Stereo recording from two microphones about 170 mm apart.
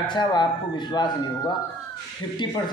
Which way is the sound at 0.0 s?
25° left (ahead or behind).